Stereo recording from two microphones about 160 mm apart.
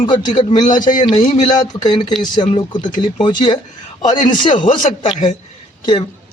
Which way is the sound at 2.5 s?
30° left (ahead or behind).